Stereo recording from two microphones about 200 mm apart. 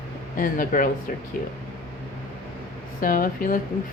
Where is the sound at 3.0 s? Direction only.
45° left (ahead or behind).